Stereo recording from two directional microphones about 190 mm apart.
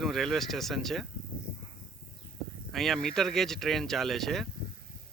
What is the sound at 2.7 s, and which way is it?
Speech, centre (ahead or behind).